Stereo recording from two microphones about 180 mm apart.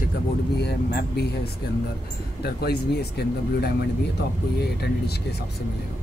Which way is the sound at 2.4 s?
60° left (ahead or behind).